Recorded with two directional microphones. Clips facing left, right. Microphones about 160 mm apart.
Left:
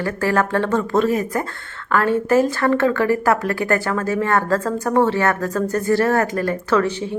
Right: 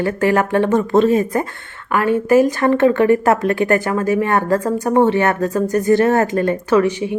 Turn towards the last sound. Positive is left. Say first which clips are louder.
# right 4 dB
turn(degrees=-15)  # may be behind; listen again after turning